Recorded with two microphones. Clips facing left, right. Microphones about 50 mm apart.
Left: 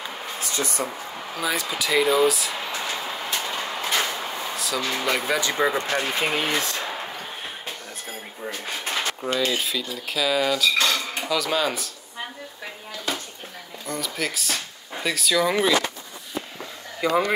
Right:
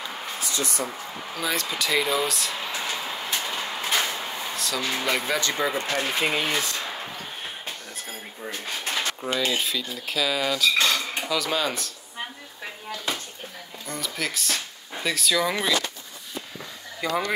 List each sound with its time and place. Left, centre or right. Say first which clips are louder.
0.4 s a sound: left 2 dB; left
0.9 s speech: left 1 dB; centre
3.3 s a sound: left 1 dB; centre
5.6 s speech: left 3 dB; centre
6.8 s a sound: left 2 dB; centre
9.3 s cutlery: left 1 dB; centre
10.0 s speech: left 3 dB; centre
13.8 s speech: left 2 dB; centre
17.0 s speech: left 5 dB; left